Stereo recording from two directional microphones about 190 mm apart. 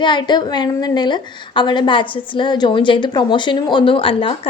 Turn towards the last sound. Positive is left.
turn(degrees=30)  # may be behind; listen again after turning